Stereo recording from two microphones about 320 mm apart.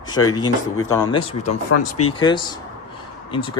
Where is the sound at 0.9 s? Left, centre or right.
Centre.